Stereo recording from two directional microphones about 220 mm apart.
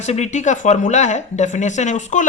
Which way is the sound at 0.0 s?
30° left (ahead or behind).